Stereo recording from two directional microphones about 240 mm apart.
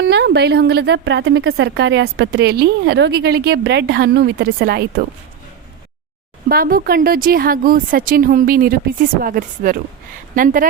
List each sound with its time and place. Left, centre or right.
0.0 s a woman's voice: right
6.5 s speech: right